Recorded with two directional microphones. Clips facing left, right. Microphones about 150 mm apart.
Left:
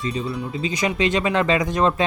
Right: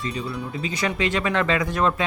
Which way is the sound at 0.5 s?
20° left (ahead or behind).